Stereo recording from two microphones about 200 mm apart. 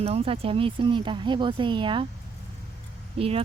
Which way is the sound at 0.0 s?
30° right (ahead or behind).